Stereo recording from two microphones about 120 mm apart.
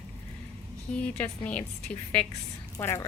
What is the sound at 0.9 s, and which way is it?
Speech, 10° left (ahead or behind).